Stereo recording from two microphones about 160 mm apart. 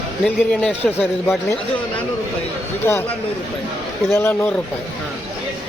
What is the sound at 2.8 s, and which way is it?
Speech, 15° left (ahead or behind).